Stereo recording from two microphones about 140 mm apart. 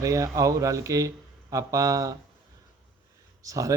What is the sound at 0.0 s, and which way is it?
A man's voice, 25° right (ahead or behind).